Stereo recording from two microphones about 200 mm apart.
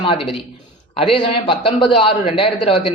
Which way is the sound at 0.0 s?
25° left (ahead or behind).